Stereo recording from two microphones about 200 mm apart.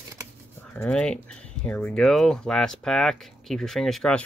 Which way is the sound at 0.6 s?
5° left (ahead or behind).